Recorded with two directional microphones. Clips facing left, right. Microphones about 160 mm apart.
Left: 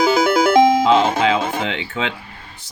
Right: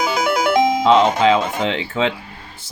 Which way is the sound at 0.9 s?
35° right (ahead or behind).